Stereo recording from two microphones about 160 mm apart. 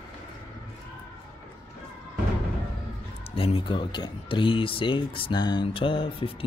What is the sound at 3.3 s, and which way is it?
Speech, 35° left (ahead or behind).